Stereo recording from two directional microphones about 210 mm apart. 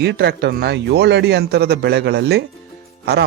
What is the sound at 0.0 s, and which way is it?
Speech, 50° right (ahead or behind).